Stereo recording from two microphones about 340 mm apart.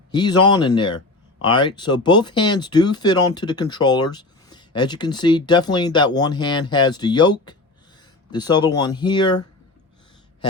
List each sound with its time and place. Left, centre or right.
0.1 s speech: centre